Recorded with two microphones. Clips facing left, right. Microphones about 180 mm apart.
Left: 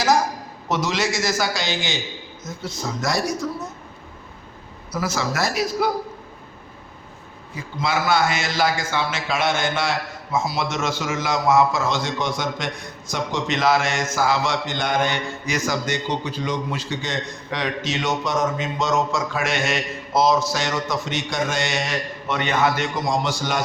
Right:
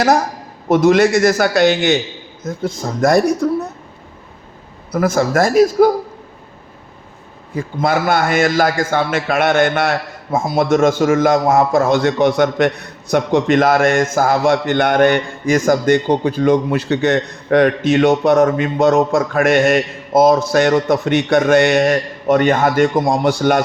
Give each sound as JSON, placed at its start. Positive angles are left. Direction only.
{"t": 0.7, "sound": "a man's voice", "side_deg": -55}
{"t": 4.9, "sound": "a man's voice", "side_deg": -55}
{"t": 7.5, "sound": "a man's voice", "side_deg": -50}